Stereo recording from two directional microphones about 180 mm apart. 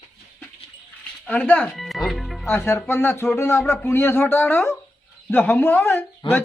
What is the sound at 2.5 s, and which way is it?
Speech, 15° left (ahead or behind).